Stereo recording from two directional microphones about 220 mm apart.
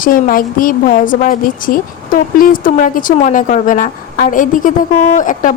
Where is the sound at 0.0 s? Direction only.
40° left (ahead or behind).